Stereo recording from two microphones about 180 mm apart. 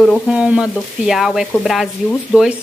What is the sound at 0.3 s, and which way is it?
Speech, 5° right (ahead or behind).